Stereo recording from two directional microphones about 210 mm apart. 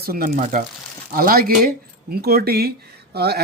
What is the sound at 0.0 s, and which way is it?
Speech, 45° right (ahead or behind).